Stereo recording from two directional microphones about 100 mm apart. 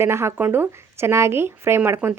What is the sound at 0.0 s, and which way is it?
Speech, 25° right (ahead or behind).